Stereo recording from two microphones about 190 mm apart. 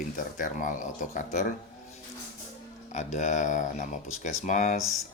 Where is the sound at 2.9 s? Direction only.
40° left (ahead or behind).